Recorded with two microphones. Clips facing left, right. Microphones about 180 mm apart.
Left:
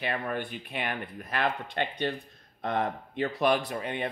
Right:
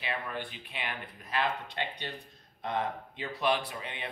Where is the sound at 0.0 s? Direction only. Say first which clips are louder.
Left 5 dB; 50° left (ahead or behind).